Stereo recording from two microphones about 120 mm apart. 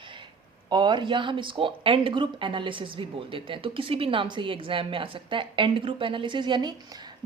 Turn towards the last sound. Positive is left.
turn(degrees=-35)  # may be behind; listen again after turning